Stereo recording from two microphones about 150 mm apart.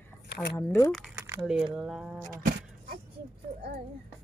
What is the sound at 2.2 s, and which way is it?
Vehicle, 70° right (ahead or behind).